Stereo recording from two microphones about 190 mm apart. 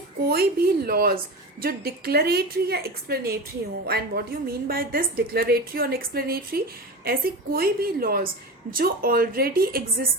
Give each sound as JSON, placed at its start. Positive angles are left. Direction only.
{"t": 0.3, "sound": "a woman's voice", "side_deg": -55}